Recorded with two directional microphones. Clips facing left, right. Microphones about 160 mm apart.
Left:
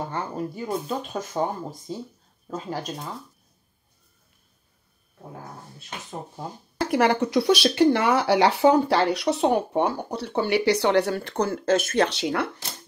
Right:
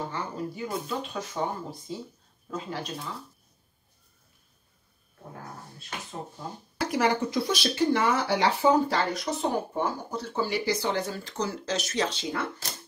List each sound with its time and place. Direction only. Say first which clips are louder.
0.1 s speech: left 4 dB; 45° left (ahead or behind)
6.9 s speech: left 5 dB; 65° left (ahead or behind)